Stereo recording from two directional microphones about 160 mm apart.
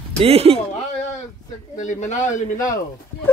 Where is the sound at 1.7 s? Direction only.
50° left (ahead or behind).